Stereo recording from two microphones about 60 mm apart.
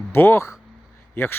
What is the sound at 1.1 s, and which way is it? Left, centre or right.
Speech, left.